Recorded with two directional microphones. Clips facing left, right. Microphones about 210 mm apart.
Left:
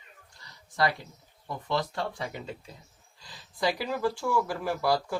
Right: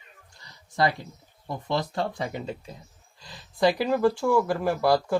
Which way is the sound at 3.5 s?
55° right (ahead or behind).